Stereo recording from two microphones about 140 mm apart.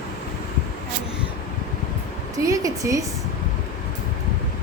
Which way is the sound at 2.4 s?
25° right (ahead or behind).